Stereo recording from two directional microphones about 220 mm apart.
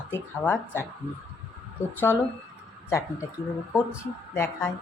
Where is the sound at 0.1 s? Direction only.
10° left (ahead or behind).